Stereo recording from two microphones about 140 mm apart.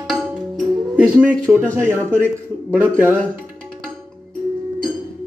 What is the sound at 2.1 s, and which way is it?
A man's voice, 15° right (ahead or behind).